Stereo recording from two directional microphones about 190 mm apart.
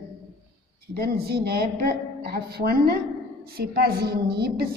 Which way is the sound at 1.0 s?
55° right (ahead or behind).